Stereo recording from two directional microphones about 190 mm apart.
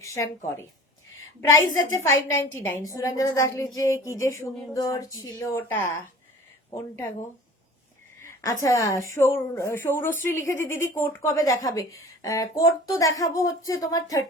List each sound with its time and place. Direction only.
0.0 s a woman's voice: 15° left (ahead or behind)
8.2 s a sound: 15° left (ahead or behind)
8.6 s a woman's voice: 15° left (ahead or behind)